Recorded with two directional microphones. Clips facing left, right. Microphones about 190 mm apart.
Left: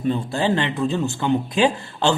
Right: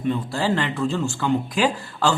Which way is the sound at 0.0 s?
30° left (ahead or behind).